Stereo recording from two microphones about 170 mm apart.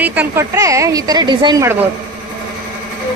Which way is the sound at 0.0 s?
10° right (ahead or behind).